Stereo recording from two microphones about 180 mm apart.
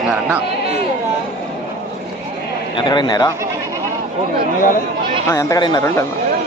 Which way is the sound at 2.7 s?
25° left (ahead or behind).